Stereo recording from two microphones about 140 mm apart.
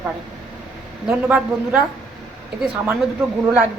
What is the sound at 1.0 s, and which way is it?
Speech, 10° right (ahead or behind).